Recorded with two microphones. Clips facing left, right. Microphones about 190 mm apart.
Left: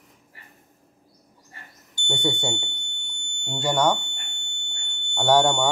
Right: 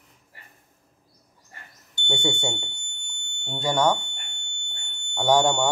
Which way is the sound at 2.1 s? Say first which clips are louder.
Left 1 dB; centre (ahead or behind).